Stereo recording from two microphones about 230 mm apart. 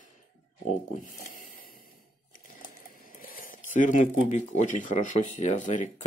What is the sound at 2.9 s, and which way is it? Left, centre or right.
Speech, left.